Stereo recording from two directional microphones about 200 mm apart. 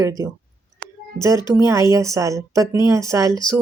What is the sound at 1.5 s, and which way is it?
Speech, 15° right (ahead or behind).